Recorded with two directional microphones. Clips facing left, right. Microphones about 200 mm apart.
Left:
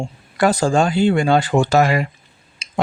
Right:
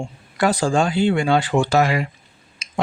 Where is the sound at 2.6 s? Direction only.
30° left (ahead or behind).